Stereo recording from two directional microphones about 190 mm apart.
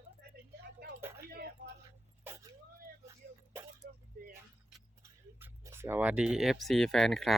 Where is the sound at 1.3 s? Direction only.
55° right (ahead or behind).